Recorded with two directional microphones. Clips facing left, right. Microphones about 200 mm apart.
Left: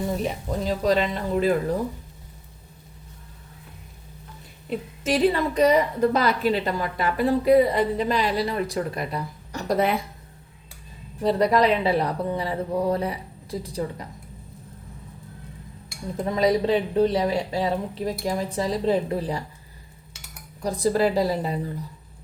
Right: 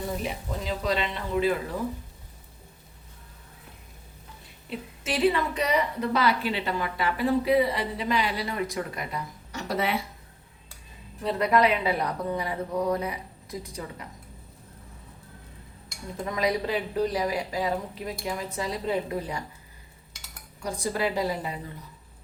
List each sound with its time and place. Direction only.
0.2 s a woman's voice: 40° left (ahead or behind)
4.7 s a woman's voice: 40° left (ahead or behind)
11.2 s a woman's voice: 35° left (ahead or behind)
16.1 s a woman's voice: 30° left (ahead or behind)
20.8 s a woman's voice: 35° left (ahead or behind)